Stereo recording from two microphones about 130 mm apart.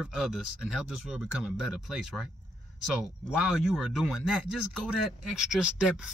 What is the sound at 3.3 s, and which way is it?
Speech, 5° right (ahead or behind).